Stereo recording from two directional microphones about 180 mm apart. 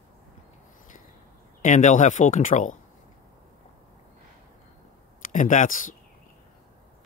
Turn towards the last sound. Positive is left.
turn(degrees=50)  # may be behind; listen again after turning